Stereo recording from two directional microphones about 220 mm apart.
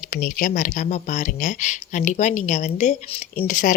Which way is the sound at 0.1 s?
40° left (ahead or behind).